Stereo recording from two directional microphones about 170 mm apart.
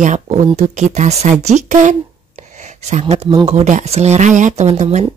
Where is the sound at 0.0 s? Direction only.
45° right (ahead or behind).